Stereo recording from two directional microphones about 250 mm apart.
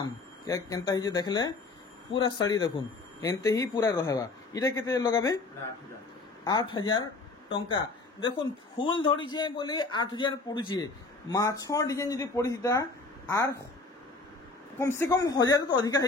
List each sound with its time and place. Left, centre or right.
0.0 s a man's voice: centre
6.4 s a man's voice: centre
14.8 s a man's voice: centre